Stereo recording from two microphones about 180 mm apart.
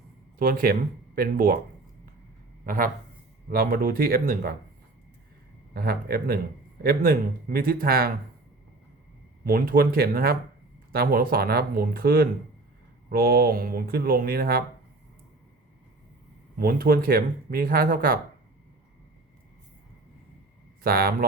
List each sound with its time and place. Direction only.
0.3 s speech: 55° right (ahead or behind)
2.6 s speech: 50° right (ahead or behind)
5.7 s speech: 55° right (ahead or behind)
9.4 s speech: 55° right (ahead or behind)
16.6 s speech: 55° right (ahead or behind)
20.8 s speech: 55° right (ahead or behind)